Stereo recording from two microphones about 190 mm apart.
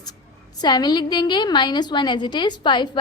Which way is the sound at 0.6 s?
20° left (ahead or behind).